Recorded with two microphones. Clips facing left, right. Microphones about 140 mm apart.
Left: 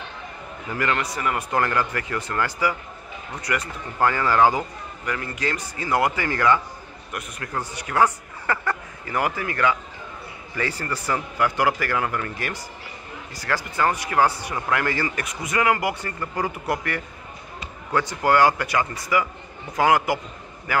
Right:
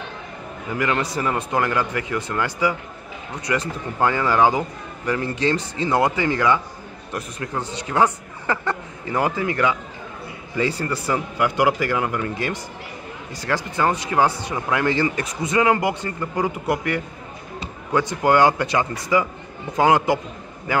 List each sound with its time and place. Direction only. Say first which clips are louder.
0.7 s speech: right 2 dB; 15° right (ahead or behind)
1.0 s a man's voice: right 3 dB; 30° right (ahead or behind)
1.5 s speech: left 1 dB; 15° right (ahead or behind)
5.0 s speech: right 6 dB; 30° right (ahead or behind)
7.1 s a man's voice: right 4 dB; 30° right (ahead or behind)